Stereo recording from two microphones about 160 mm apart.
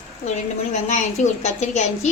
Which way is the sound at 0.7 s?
45° left (ahead or behind).